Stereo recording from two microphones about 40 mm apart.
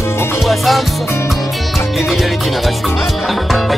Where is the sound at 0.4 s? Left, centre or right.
Centre.